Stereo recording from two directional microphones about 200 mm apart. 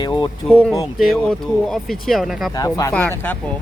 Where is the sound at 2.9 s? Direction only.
5° left (ahead or behind).